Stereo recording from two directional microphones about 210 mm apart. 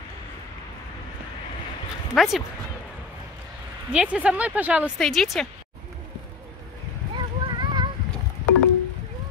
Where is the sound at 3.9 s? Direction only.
5° right (ahead or behind).